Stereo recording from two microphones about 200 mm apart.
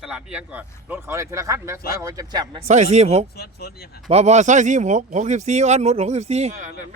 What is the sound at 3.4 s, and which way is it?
Speech, 55° left (ahead or behind).